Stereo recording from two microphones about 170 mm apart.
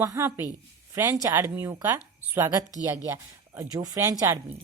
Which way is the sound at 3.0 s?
15° right (ahead or behind).